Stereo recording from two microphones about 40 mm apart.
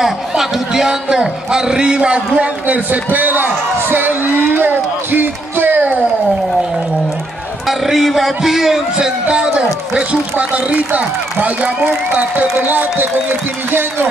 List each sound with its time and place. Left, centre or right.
0.0 s a sound: centre
0.8 s a man's voice: centre
2.6 s a man's voice: right
3.9 s music: right
7.6 s a man's voice: centre; by 10.0 s right
10.3 s a man's voice: right
12.5 s speech: right